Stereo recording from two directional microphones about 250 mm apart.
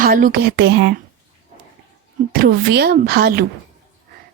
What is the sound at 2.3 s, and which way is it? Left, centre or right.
A woman's voice, right.